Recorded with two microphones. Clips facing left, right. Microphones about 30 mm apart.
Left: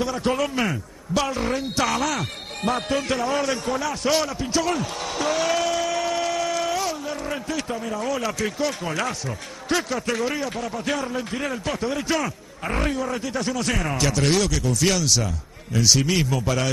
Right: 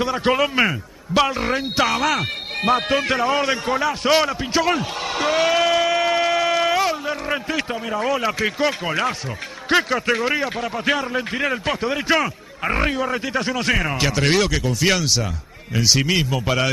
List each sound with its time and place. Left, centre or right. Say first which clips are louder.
0.0 s a man's voice: right 4 dB; right